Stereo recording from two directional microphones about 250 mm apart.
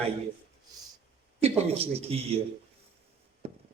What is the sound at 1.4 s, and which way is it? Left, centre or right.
Speech, right.